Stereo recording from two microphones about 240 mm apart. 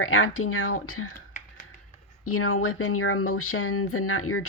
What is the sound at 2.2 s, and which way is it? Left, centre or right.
Speech, left.